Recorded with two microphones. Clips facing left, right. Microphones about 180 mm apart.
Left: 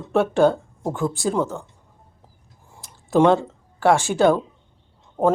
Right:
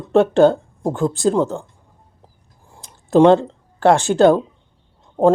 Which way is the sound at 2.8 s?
20° right (ahead or behind).